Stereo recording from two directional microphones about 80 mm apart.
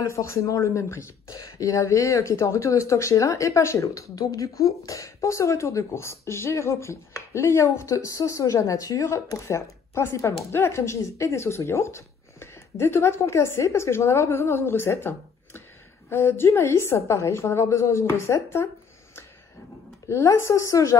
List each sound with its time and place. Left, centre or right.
0.0 s speech: left
20.1 s speech: left